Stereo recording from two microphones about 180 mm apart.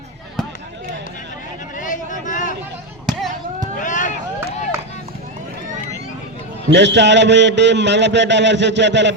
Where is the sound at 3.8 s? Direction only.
45° left (ahead or behind).